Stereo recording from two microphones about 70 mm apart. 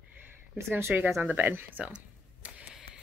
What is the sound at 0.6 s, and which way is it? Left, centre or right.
Speech, right.